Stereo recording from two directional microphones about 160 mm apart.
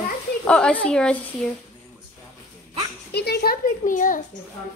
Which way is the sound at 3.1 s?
90° left.